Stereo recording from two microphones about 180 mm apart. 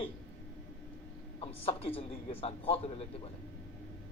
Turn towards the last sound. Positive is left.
turn(degrees=30)  # may be behind; listen again after turning